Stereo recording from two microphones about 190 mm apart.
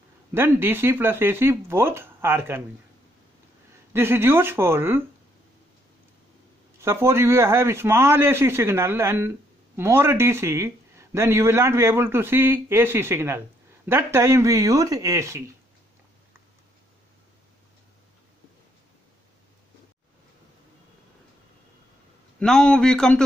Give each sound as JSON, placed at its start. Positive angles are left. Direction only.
{"t": 0.3, "sound": "a man's voice", "side_deg": -10}
{"t": 3.9, "sound": "a man's voice", "side_deg": -10}
{"t": 6.8, "sound": "a man's voice", "side_deg": -15}
{"t": 22.4, "sound": "a man's voice", "side_deg": 5}